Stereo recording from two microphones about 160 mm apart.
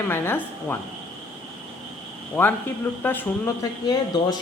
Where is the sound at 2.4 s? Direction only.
10° left (ahead or behind).